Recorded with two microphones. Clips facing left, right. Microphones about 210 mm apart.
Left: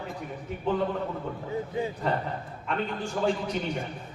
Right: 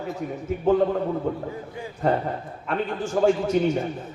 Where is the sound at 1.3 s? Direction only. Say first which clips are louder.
Right 9 dB; 45° right (ahead or behind).